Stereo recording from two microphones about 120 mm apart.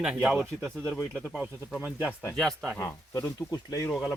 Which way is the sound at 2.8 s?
30° left (ahead or behind).